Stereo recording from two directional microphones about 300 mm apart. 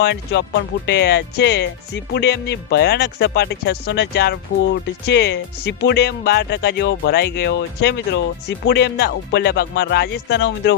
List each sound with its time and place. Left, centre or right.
0.0 s speech: left